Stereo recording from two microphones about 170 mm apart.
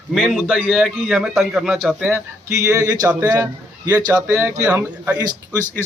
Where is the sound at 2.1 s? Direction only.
15° right (ahead or behind).